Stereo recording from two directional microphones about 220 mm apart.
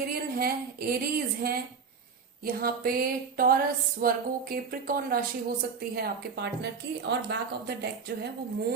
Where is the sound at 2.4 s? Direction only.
40° right (ahead or behind).